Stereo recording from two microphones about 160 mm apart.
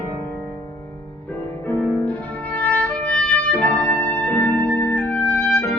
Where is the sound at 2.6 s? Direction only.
10° left (ahead or behind).